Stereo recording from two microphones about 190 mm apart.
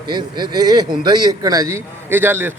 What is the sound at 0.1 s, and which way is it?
Speech, 25° right (ahead or behind).